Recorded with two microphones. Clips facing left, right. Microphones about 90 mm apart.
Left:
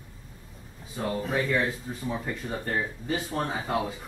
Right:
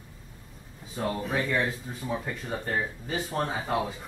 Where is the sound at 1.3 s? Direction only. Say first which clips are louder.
Left 2 dB; 15° right (ahead or behind).